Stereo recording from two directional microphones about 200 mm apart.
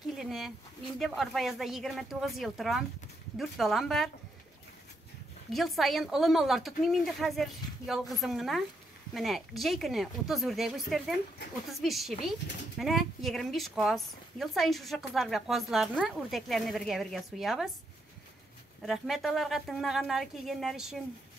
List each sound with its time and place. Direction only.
0.0 s a sound: centre (ahead or behind)
0.9 s speech: centre (ahead or behind)
5.5 s speech: centre (ahead or behind)
18.8 s speech: centre (ahead or behind)